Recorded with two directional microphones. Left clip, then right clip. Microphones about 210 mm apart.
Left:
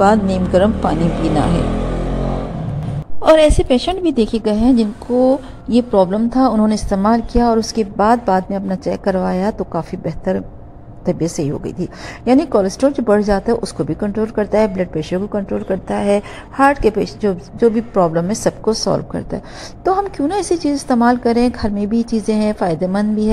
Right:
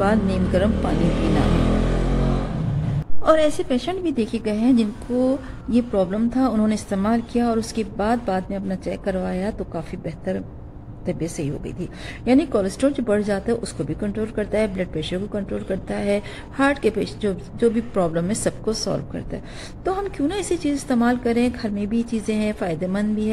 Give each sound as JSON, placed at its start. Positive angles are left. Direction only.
{"t": 0.0, "sound": "speech", "side_deg": 20}
{"t": 3.2, "sound": "speech", "side_deg": 20}